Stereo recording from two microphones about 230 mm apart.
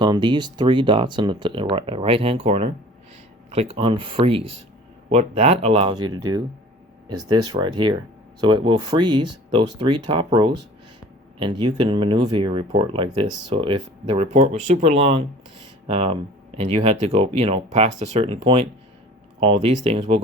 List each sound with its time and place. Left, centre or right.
0.0 s speech: centre
19.4 s speech: right